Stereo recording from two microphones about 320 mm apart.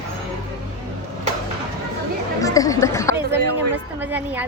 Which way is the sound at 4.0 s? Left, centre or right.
Centre.